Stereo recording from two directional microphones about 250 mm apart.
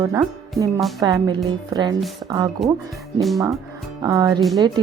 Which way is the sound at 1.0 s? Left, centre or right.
Centre.